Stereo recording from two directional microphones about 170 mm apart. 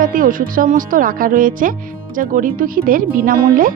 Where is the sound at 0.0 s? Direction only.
55° right (ahead or behind).